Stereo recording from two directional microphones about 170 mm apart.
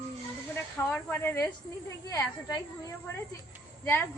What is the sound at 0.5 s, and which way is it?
A woman's voice, 15° left (ahead or behind).